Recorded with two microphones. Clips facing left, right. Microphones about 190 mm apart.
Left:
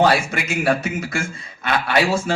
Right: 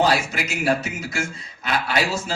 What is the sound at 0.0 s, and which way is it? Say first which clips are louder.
A man's voice: left 3 dB; 55° left (ahead or behind).